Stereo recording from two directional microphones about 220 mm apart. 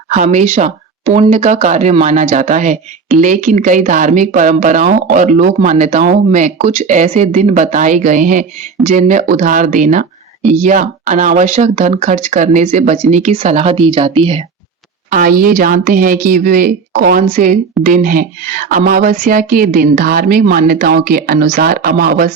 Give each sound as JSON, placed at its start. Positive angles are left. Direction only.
{"t": 0.1, "sound": "speech", "side_deg": -30}
{"t": 15.1, "sound": "speech", "side_deg": -40}